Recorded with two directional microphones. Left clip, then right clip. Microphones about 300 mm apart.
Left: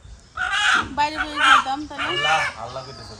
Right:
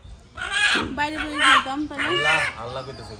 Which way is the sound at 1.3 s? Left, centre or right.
Centre.